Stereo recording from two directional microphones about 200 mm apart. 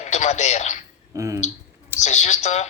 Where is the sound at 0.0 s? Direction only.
35° left (ahead or behind).